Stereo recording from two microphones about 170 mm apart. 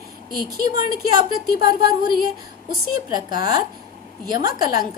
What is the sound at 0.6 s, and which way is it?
A woman's voice, 25° right (ahead or behind).